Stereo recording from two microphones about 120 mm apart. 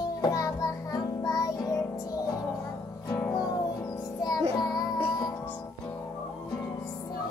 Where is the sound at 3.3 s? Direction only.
30° left (ahead or behind).